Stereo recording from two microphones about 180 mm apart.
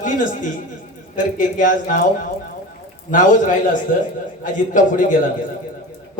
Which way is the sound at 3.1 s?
45° left (ahead or behind).